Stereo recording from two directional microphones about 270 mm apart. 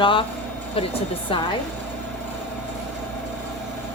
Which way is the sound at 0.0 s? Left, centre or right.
Centre.